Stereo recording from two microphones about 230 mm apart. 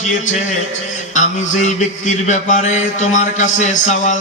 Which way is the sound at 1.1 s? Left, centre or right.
Left.